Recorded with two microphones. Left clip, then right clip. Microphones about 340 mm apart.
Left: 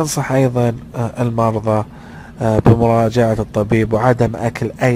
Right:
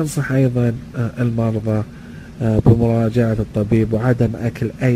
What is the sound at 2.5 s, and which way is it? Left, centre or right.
Speech, left.